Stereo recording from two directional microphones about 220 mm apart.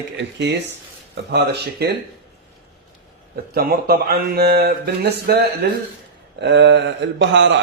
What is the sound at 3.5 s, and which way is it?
Speech, 45° right (ahead or behind).